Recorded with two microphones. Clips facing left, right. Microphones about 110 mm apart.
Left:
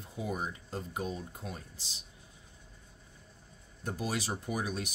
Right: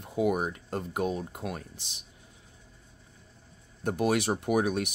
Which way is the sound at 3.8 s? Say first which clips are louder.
Right 9 dB; 65° right (ahead or behind).